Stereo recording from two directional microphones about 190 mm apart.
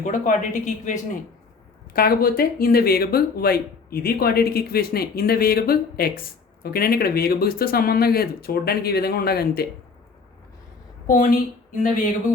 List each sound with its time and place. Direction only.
0.0 s a woman's voice: 40° left (ahead or behind)
11.0 s a woman's voice: 40° left (ahead or behind)